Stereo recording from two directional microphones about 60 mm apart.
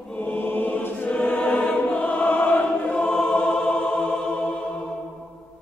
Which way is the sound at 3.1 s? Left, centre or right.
Centre.